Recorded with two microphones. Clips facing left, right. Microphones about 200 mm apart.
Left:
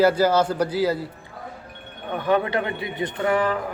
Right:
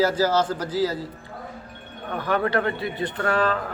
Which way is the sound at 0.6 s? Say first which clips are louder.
Left 3 dB; 60° left (ahead or behind).